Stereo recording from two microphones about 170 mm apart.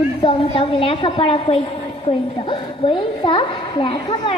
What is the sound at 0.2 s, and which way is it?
A woman's voice, 30° left (ahead or behind).